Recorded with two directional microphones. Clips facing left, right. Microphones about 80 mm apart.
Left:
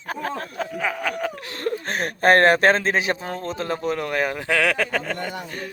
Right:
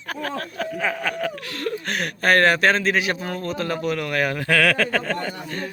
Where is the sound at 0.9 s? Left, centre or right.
Centre.